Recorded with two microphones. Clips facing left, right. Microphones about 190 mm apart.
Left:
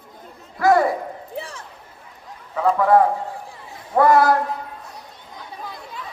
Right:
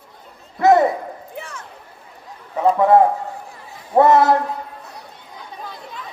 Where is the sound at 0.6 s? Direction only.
20° right (ahead or behind).